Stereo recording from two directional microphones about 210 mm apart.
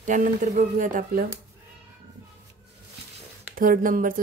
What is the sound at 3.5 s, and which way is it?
Speech, 40° right (ahead or behind).